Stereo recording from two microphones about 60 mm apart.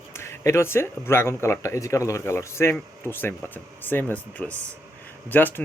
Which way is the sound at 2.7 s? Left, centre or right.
Left.